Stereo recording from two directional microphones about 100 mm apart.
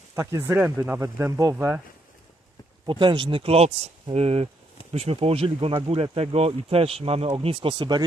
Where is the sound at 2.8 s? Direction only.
50° right (ahead or behind); by 4.5 s 85° right.